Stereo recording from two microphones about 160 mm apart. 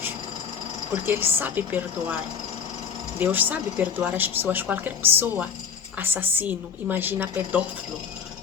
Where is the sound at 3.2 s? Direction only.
10° right (ahead or behind).